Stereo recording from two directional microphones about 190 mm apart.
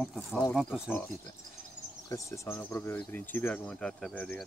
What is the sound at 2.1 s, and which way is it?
Speech, 15° left (ahead or behind).